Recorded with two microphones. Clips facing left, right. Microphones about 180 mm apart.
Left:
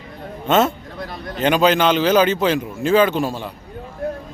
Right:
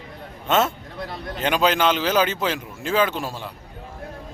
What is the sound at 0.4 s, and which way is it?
Speech, 5° right (ahead or behind).